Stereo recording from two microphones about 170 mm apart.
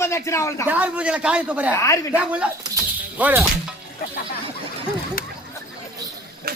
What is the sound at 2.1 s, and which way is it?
A man's voice, 5° right (ahead or behind).